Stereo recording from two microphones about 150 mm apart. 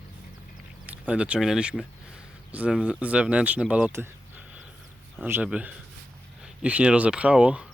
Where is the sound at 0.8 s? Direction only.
10° right (ahead or behind).